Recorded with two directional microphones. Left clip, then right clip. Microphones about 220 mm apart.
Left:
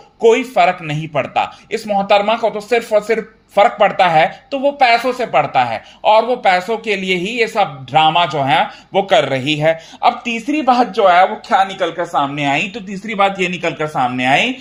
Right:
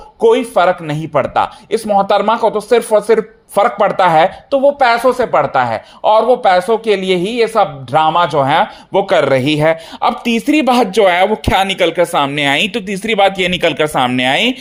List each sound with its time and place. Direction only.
0.2 s a man's voice: 25° right (ahead or behind); by 14.5 s 55° right (ahead or behind)